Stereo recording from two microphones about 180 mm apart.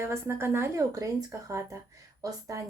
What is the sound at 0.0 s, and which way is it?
Speech, 15° right (ahead or behind).